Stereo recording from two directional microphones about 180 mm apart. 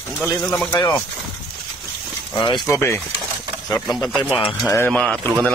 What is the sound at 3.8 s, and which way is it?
Speech, centre (ahead or behind).